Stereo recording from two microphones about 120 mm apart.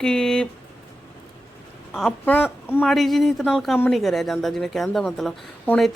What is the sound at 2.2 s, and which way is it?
Speech, 15° left (ahead or behind).